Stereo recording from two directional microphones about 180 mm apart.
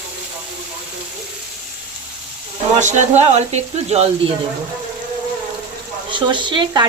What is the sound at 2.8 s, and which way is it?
Speech, 40° right (ahead or behind).